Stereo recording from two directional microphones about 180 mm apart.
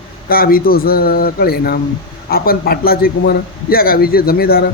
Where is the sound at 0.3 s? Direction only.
55° left (ahead or behind).